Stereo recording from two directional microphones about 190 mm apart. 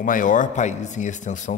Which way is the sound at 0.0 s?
45° left (ahead or behind).